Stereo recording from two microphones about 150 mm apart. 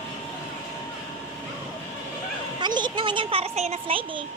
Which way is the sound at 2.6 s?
30° right (ahead or behind).